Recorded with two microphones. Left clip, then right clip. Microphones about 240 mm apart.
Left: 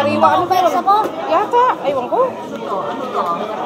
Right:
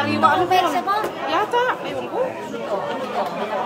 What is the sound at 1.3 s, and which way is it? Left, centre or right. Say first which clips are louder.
Speech: left 6 dB; right.